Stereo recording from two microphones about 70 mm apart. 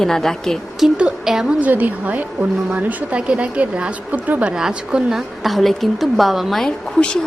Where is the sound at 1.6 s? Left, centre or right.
Right.